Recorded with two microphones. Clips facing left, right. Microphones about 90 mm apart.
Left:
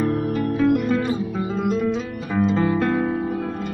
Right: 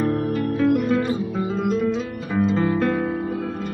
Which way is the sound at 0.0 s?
Centre (ahead or behind).